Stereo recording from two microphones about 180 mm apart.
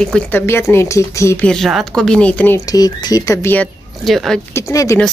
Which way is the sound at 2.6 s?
20° left (ahead or behind).